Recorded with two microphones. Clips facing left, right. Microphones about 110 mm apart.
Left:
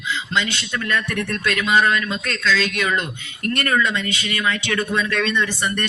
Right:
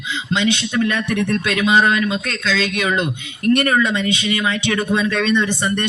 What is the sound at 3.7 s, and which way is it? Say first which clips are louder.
Speech: right 3 dB; 20° right (ahead or behind).